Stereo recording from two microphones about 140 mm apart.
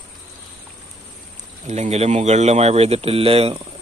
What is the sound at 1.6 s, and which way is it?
Speech, 55° right (ahead or behind).